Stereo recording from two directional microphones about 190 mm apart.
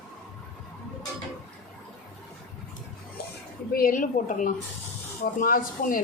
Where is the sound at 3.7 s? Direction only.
45° left (ahead or behind).